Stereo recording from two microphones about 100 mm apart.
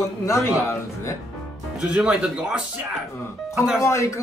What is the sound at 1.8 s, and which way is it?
Speech, 10° right (ahead or behind).